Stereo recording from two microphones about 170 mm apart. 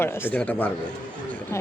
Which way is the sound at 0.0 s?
10° left (ahead or behind).